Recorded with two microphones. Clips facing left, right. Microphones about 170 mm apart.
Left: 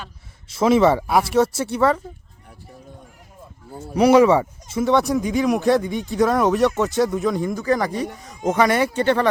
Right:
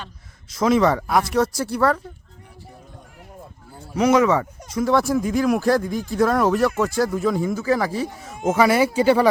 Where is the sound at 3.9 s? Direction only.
35° left (ahead or behind).